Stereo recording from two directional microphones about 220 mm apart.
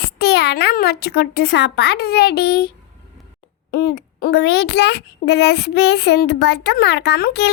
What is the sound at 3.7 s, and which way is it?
A child's voice, 45° left (ahead or behind).